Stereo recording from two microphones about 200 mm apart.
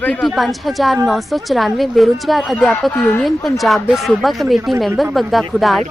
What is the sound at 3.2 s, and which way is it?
Speech, centre (ahead or behind).